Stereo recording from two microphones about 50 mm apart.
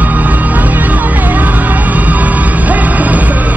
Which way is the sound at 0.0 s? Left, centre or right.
Right.